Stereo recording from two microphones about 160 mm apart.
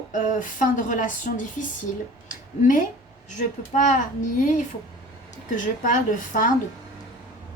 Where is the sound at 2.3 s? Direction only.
55° left (ahead or behind).